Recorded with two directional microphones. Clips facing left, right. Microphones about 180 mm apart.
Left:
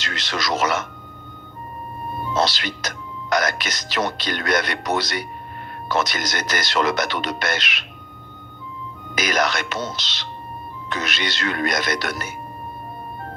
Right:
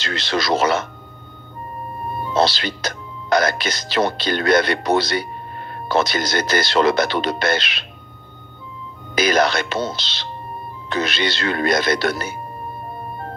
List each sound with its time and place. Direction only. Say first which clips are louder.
0.0 s speech: right 5 dB; 30° right (ahead or behind)
2.3 s speech: right 4 dB; 30° right (ahead or behind)
9.1 s speech: right 5 dB; 30° right (ahead or behind)